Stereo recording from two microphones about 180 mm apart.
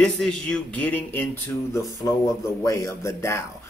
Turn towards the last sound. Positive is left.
turn(degrees=15)  # may be behind; listen again after turning